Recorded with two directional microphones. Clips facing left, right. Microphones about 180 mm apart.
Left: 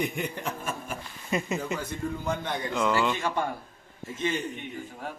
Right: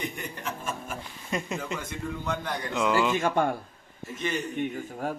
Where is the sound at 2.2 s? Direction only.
25° left (ahead or behind).